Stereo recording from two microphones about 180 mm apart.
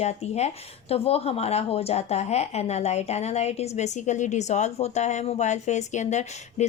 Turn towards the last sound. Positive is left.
turn(degrees=40)  # may be behind; listen again after turning